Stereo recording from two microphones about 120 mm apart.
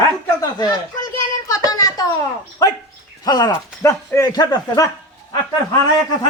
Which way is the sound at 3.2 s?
35° left (ahead or behind).